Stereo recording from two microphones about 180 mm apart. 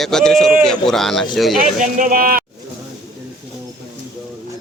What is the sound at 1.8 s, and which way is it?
Speech, 50° right (ahead or behind).